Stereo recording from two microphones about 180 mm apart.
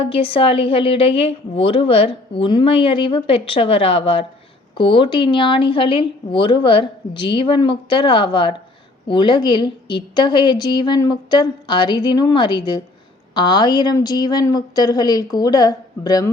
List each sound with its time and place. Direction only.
0.0 s a woman's voice: 30° left (ahead or behind)